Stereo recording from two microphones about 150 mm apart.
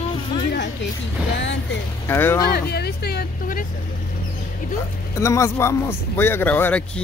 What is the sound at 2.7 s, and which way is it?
Speech, 90° left.